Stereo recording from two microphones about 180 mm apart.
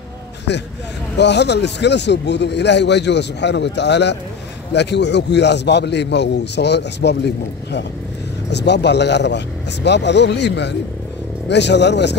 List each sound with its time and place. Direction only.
0.5 s a man's voice: 75° left (ahead or behind)
8.5 s a man's voice: 70° left (ahead or behind)